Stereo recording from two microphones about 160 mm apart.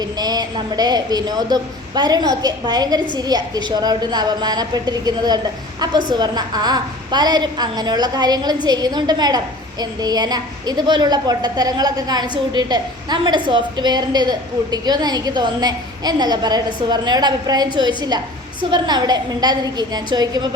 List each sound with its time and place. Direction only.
0.0 s a woman's voice: 25° right (ahead or behind)